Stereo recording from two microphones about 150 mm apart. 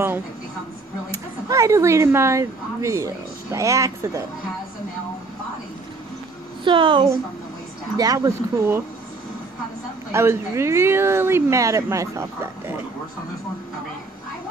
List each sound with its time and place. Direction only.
1.1 s speech: 20° right (ahead or behind)
6.6 s a woman's voice: 35° right (ahead or behind)
8.0 s speech: 20° right (ahead or behind)
10.1 s speech: 20° right (ahead or behind)